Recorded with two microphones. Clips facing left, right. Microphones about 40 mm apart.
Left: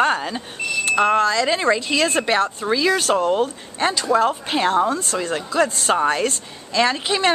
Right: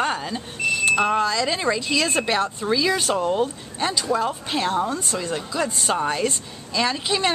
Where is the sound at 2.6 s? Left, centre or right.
Centre.